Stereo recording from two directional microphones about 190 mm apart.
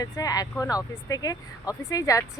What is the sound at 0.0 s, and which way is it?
Speech, 20° left (ahead or behind).